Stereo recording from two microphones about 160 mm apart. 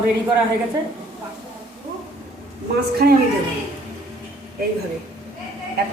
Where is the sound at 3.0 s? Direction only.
65° right (ahead or behind).